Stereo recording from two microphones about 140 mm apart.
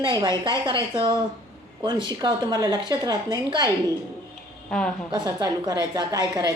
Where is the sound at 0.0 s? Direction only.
30° right (ahead or behind).